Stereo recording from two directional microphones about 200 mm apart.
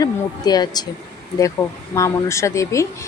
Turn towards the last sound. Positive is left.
turn(degrees=15)  # may be behind; listen again after turning